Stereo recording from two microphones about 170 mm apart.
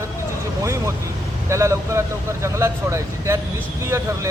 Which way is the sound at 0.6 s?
15° right (ahead or behind).